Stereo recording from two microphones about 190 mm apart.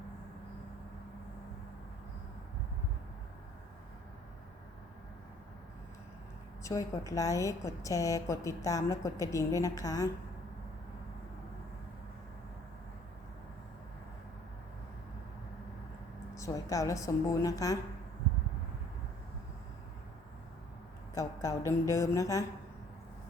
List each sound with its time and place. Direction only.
6.6 s a woman's voice: 15° left (ahead or behind)
16.3 s a woman's voice: 15° left (ahead or behind)
21.2 s a woman's voice: 15° left (ahead or behind)